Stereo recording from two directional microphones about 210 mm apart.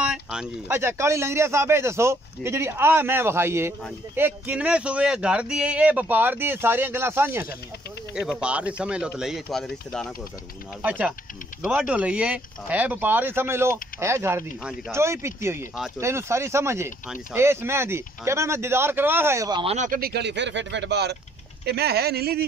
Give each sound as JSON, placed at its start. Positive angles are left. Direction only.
{"t": 0.0, "sound": "speech", "side_deg": -5}
{"t": 19.6, "sound": "speech", "side_deg": -35}